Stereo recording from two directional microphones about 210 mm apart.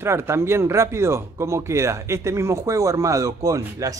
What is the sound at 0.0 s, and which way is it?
Speech, 10° right (ahead or behind).